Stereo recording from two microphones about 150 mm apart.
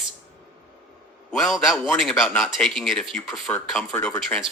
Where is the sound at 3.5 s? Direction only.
15° left (ahead or behind).